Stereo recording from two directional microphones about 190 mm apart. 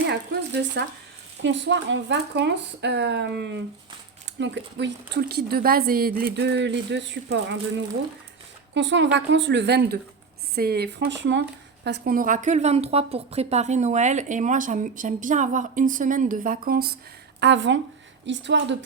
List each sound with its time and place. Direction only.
0.1 s a woman's voice: 65° right (ahead or behind)
8.7 s a woman's voice: 70° right (ahead or behind)
11.1 s speech: 70° right (ahead or behind); by 16.9 s 50° right (ahead or behind)
17.4 s a woman's voice: 75° right (ahead or behind)